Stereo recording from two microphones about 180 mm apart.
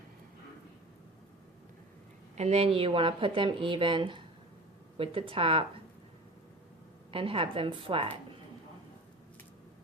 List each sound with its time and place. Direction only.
2.3 s a woman's voice: 35° right (ahead or behind)
7.1 s a woman's voice: 30° right (ahead or behind)